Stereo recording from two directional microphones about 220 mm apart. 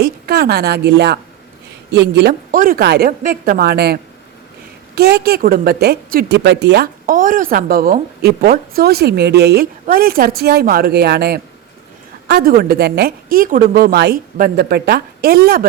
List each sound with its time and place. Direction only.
0.0 s a woman's voice: 45° right (ahead or behind)
4.9 s a woman's voice: 45° right (ahead or behind)